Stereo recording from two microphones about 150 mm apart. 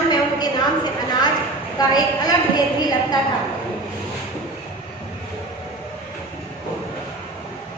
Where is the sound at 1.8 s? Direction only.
25° left (ahead or behind).